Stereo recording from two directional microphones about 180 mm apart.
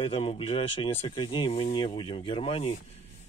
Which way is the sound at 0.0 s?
30° left (ahead or behind).